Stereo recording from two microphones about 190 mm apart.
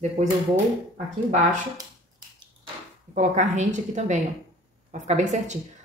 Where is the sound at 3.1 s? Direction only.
40° right (ahead or behind).